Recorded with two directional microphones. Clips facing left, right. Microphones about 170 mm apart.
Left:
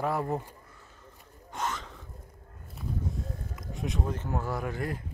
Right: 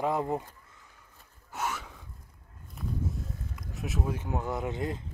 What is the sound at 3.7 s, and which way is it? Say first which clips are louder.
Speech: left 1 dB; 5° right (ahead or behind).